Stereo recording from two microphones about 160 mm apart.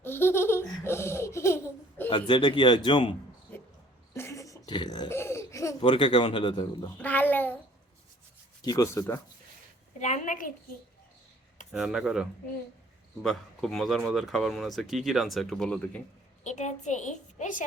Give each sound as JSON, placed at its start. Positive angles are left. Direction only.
{"t": 0.0, "sound": "laughter", "side_deg": 15}
{"t": 2.0, "sound": "speech", "side_deg": 30}
{"t": 4.1, "sound": "a sound", "side_deg": 20}
{"t": 5.0, "sound": "laughter", "side_deg": 15}
{"t": 5.8, "sound": "speech", "side_deg": 30}
{"t": 7.0, "sound": "a sound", "side_deg": 10}
{"t": 8.6, "sound": "speech", "side_deg": 20}
{"t": 10.0, "sound": "a sound", "side_deg": 50}
{"t": 11.7, "sound": "speech", "side_deg": -5}
{"t": 16.4, "sound": "a woman's voice", "side_deg": 45}